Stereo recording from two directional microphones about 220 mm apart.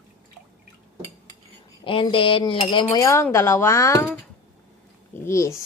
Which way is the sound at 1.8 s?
25° left (ahead or behind).